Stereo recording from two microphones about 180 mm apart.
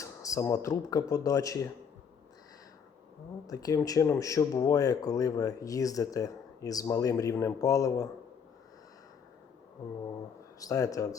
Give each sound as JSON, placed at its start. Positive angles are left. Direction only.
{"t": 0.0, "sound": "speech", "side_deg": 15}
{"t": 3.4, "sound": "speech", "side_deg": 20}
{"t": 10.6, "sound": "speech", "side_deg": 20}